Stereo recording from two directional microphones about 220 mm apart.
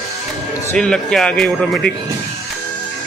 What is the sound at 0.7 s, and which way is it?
Speech, 5° left (ahead or behind).